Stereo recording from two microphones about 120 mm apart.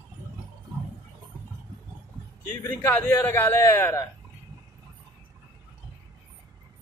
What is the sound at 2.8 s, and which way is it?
A man's voice, 15° left (ahead or behind).